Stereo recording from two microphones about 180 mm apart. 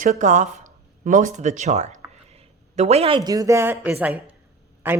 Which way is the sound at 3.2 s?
20° right (ahead or behind).